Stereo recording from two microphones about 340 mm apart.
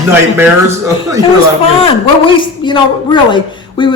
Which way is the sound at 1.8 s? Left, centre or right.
Centre.